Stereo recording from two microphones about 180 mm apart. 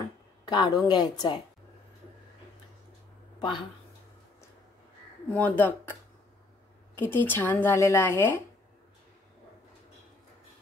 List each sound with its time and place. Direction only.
0.5 s a woman's voice: 25° left (ahead or behind)
3.3 s speech: 25° left (ahead or behind)
5.3 s speech: 10° left (ahead or behind)
7.0 s speech: 10° left (ahead or behind)